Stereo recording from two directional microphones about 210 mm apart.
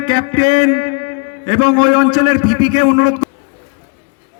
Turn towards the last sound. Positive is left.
turn(degrees=-20)  # may be behind; listen again after turning